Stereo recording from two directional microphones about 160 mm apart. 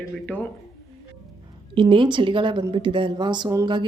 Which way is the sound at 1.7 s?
30° right (ahead or behind).